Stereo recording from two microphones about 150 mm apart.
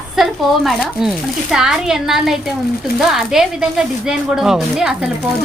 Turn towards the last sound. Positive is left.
turn(degrees=-5)  # may be behind; listen again after turning